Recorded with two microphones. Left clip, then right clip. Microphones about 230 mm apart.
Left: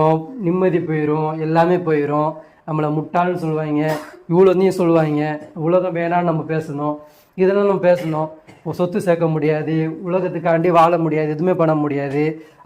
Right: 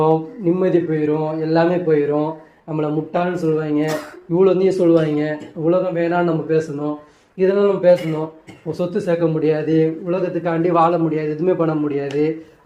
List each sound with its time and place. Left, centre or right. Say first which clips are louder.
0.0 s a man's voice: even; left
5.6 s a man's voice: even; left
9.7 s a man's voice: right 3 dB; left
10.5 s speech: left 3 dB; left